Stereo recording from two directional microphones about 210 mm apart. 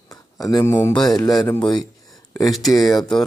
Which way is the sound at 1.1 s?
15° left (ahead or behind).